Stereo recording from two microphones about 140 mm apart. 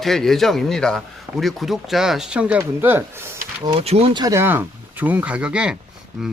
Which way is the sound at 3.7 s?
50° right (ahead or behind).